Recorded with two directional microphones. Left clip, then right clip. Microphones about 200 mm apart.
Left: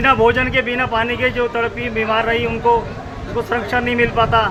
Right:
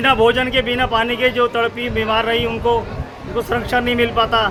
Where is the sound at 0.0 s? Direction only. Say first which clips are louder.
Even; 20° right (ahead or behind).